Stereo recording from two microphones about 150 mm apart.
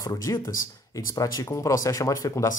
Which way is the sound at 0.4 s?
65° left (ahead or behind).